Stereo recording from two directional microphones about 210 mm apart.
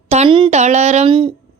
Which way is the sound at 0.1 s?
25° right (ahead or behind).